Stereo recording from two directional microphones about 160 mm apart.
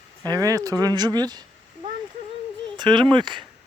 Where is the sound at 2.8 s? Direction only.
30° right (ahead or behind).